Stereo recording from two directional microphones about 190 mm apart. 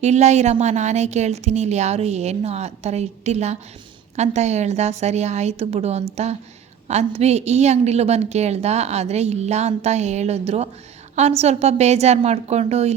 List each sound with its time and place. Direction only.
0.0 s a woman's voice: 35° right (ahead or behind)